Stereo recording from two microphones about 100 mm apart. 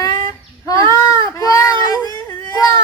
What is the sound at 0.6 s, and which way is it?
Goat, 35° left (ahead or behind).